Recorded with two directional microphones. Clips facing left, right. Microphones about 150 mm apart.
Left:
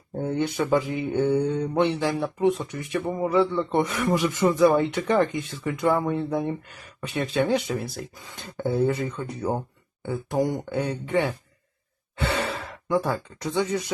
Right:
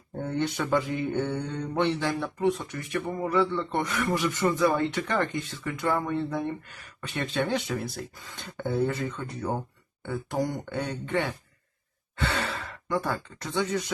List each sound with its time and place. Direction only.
0.2 s speech: 10° left (ahead or behind)
7.4 s speech: 5° left (ahead or behind)
12.4 s speech: 15° left (ahead or behind)